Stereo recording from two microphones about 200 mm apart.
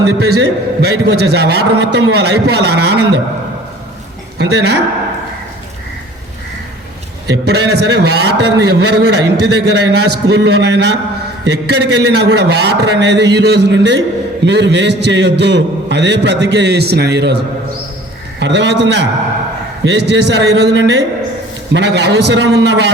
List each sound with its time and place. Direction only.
0.2 s a man's voice: 55° right (ahead or behind)
4.4 s a man's voice: 55° right (ahead or behind)
7.4 s a man's voice: 55° right (ahead or behind)
18.3 s a man's voice: 60° right (ahead or behind)